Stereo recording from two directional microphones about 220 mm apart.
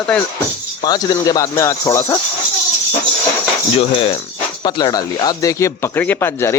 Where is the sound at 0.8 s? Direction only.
20° left (ahead or behind).